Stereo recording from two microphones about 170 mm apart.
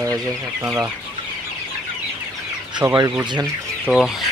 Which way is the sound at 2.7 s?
20° right (ahead or behind).